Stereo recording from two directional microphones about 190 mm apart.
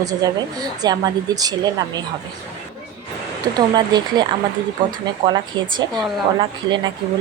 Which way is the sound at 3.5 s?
20° right (ahead or behind).